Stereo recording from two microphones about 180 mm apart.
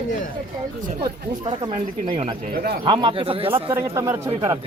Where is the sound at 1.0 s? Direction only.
25° right (ahead or behind).